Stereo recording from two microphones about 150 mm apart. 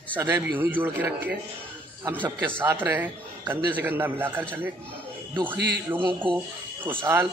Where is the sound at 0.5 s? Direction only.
10° right (ahead or behind).